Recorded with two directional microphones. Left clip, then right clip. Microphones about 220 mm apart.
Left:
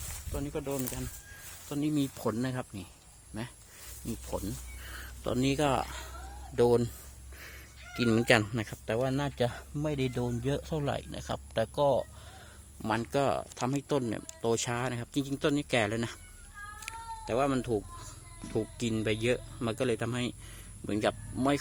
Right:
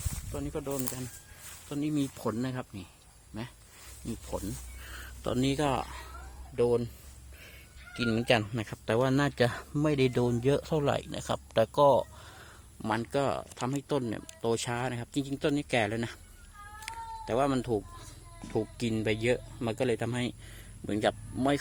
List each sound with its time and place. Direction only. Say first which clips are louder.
0.3 s speech: even; centre (ahead or behind)
6.6 s speech: left 2 dB; 20° left (ahead or behind)
7.9 s speech: left 2 dB; 15° left (ahead or behind)
8.9 s speech: right 4 dB; 35° right (ahead or behind)
12.8 s speech: even; 5° right (ahead or behind)
16.8 s cat: right 3 dB; 10° right (ahead or behind)
18.5 s speech: right 1 dB; 10° right (ahead or behind)